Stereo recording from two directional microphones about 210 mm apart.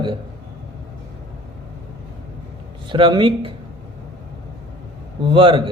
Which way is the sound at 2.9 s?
20° right (ahead or behind).